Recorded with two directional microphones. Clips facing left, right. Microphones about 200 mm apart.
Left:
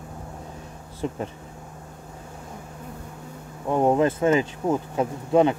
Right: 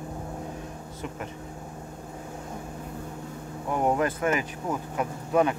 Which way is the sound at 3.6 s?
25° left (ahead or behind).